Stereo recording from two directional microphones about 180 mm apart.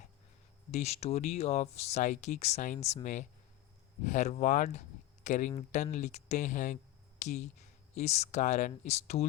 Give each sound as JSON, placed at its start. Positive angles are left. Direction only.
{"t": 0.7, "sound": "speech", "side_deg": 35}